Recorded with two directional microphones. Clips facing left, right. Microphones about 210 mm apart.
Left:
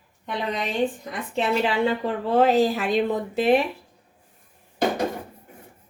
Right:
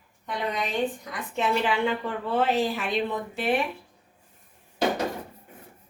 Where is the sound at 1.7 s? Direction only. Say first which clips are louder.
Left 3 dB; 35° left (ahead or behind).